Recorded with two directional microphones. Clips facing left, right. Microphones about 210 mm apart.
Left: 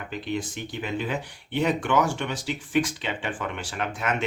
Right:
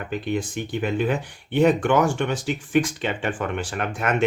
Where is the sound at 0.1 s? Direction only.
50° right (ahead or behind).